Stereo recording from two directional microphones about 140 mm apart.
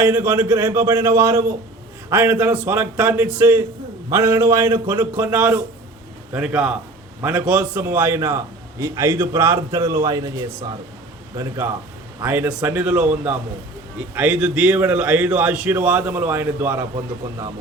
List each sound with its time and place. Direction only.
0.0 s a man's voice: 15° right (ahead or behind)